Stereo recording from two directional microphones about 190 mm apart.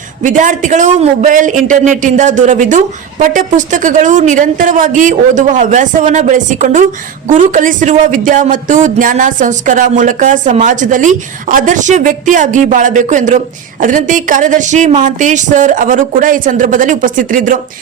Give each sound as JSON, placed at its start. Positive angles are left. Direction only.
{"t": 0.2, "sound": "speech", "side_deg": -40}